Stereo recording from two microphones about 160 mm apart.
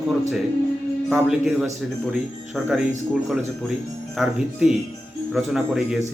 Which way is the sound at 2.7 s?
Centre (ahead or behind).